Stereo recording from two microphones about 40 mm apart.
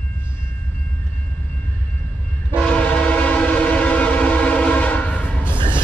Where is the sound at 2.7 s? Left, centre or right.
Left.